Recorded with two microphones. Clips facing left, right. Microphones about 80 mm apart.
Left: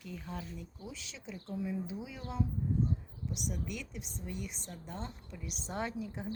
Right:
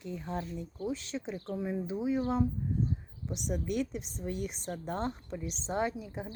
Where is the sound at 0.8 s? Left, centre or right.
Right.